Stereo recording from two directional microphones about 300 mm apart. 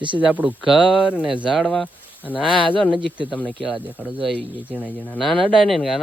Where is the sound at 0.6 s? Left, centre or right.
Centre.